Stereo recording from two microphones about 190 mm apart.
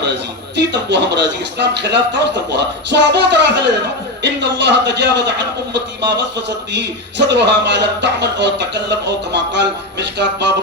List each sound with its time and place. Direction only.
0.7 s a man's voice: 65° right (ahead or behind)
6.7 s a man's voice: 65° right (ahead or behind)